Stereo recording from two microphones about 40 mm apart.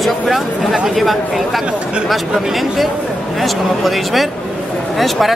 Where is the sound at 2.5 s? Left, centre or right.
Centre.